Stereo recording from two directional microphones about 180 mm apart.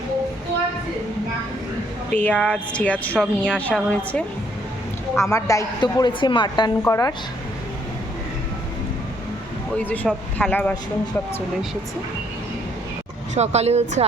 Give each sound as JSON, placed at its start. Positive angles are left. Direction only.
{"t": 2.0, "sound": "a woman's voice", "side_deg": 10}
{"t": 9.8, "sound": "speech", "side_deg": 10}
{"t": 13.3, "sound": "speech", "side_deg": -40}